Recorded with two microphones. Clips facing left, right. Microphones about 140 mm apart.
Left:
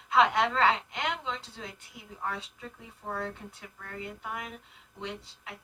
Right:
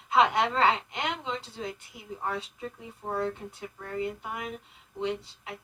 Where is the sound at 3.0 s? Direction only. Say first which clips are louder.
Right 5 dB; 25° right (ahead or behind).